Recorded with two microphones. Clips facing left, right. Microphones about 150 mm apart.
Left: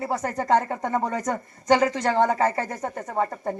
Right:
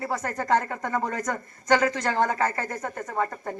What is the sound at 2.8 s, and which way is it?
Speech, 30° left (ahead or behind).